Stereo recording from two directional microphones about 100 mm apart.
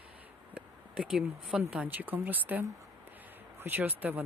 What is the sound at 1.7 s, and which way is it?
Speech, 15° right (ahead or behind).